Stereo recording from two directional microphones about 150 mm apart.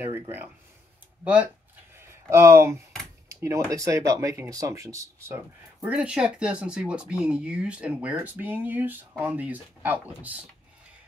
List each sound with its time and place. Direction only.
0.0 s speech: 15° right (ahead or behind)
3.3 s a sound: 20° right (ahead or behind)
3.7 s speech: 20° right (ahead or behind)